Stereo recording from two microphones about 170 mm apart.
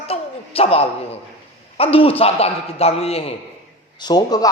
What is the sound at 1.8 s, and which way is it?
A man's voice, 35° left (ahead or behind).